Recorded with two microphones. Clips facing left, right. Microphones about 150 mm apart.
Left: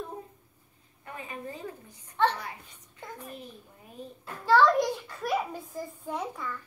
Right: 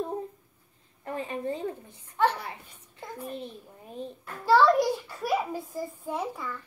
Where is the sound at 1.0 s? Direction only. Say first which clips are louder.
Right 8 dB; 30° right (ahead or behind).